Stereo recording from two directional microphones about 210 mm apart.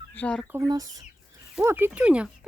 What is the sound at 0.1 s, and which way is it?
Speech, 5° left (ahead or behind).